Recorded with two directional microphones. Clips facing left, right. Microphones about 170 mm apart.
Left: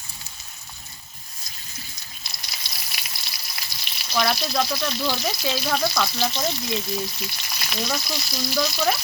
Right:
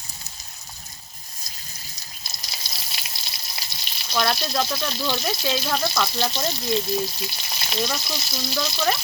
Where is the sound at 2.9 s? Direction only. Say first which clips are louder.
Even; 25° right (ahead or behind).